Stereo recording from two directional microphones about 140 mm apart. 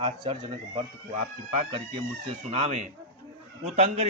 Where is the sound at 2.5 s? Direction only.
55° right (ahead or behind).